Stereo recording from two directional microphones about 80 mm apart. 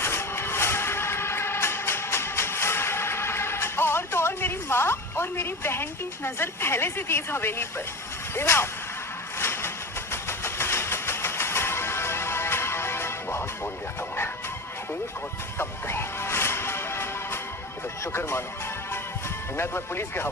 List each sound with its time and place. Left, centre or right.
0.0 s music: left
8.4 s speech: left
9.4 s vehicle: left
15.5 s music: left
18.0 s speech: left
19.5 s speech: left